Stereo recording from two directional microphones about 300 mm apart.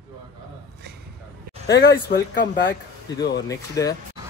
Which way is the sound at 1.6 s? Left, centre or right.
Left.